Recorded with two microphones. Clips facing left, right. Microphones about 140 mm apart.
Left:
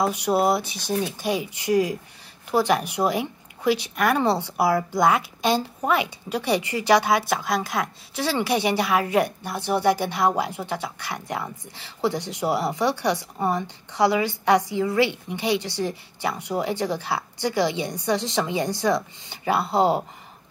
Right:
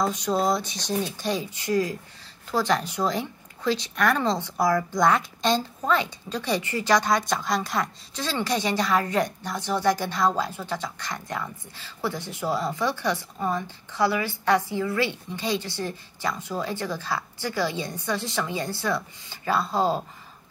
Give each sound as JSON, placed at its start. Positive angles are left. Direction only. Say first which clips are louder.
{"t": 0.0, "sound": "a woman's voice", "louder": "left 3 dB", "side_deg": 10}